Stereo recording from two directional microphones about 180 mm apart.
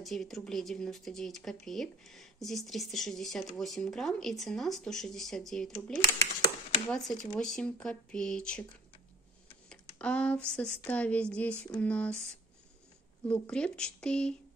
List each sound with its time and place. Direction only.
0.0 s speech: centre (ahead or behind)
9.7 s speech: 5° left (ahead or behind)
13.3 s speech: 5° left (ahead or behind)